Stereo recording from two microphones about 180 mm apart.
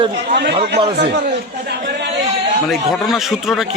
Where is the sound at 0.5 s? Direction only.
30° right (ahead or behind).